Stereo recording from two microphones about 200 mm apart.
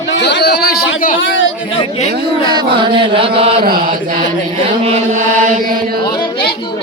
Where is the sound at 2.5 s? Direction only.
25° right (ahead or behind).